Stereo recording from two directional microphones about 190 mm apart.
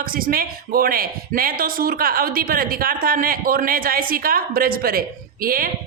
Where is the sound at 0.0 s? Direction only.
50° right (ahead or behind).